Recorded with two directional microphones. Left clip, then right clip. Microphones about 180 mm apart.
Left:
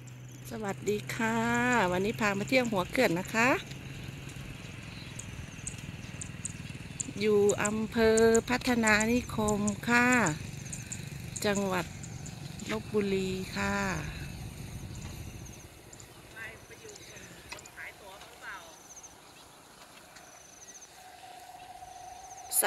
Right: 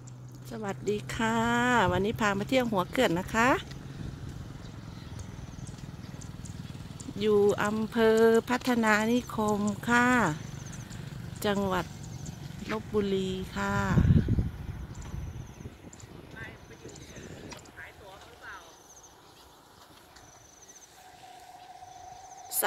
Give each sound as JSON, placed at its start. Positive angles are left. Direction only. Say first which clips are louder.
{"t": 0.5, "sound": "speech", "louder": "right 1 dB", "side_deg": 5}
{"t": 7.2, "sound": "speech", "louder": "right 2 dB", "side_deg": 0}
{"t": 11.4, "sound": "speech", "louder": "right 1 dB", "side_deg": 5}
{"t": 13.1, "sound": "speech", "louder": "right 1 dB", "side_deg": -70}
{"t": 13.5, "sound": "speech", "louder": "right 1 dB", "side_deg": -5}